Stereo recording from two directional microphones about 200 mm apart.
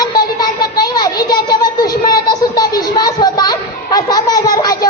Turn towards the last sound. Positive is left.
turn(degrees=20)  # may be behind; listen again after turning